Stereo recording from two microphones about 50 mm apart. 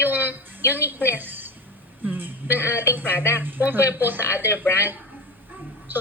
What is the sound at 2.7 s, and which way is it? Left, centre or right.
A woman's voice, right.